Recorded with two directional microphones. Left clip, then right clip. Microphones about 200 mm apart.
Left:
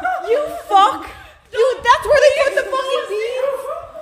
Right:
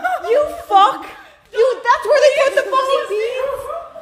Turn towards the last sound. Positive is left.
turn(degrees=0)  # may be behind; listen again after turning